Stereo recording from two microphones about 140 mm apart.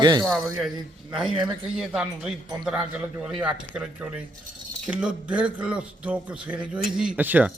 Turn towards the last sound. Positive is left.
turn(degrees=-10)  # may be behind; listen again after turning